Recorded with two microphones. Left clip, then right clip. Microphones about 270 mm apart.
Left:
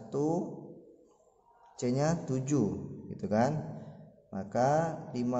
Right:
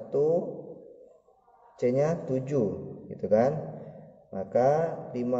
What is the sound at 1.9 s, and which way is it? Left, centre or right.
A man's voice, centre.